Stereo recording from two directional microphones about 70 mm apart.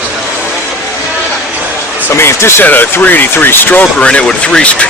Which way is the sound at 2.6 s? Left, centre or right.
Left.